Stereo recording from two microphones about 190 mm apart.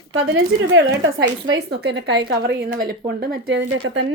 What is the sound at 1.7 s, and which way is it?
A woman's voice, 60° right (ahead or behind).